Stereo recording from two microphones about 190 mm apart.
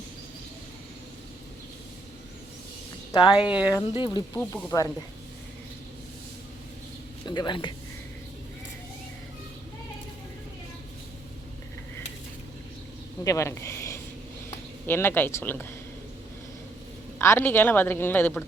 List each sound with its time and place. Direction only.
3.1 s speech: 25° left (ahead or behind)
3.3 s speech: 5° right (ahead or behind)
3.8 s speech: 25° left (ahead or behind)
4.4 s a woman's voice: 15° left (ahead or behind)
7.3 s speech: 25° left (ahead or behind)
13.2 s a woman's voice: 15° left (ahead or behind)
17.2 s a woman's voice: 10° left (ahead or behind)